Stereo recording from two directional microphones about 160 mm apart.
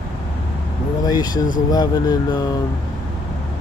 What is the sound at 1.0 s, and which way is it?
Speech, 25° left (ahead or behind).